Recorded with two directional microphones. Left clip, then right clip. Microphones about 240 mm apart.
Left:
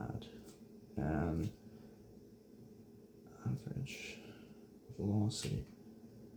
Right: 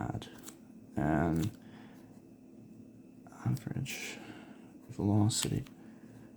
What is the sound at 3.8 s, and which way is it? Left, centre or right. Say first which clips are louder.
Speech: right 8 dB; right.